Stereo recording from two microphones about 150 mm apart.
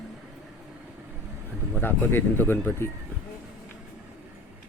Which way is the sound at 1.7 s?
15° left (ahead or behind).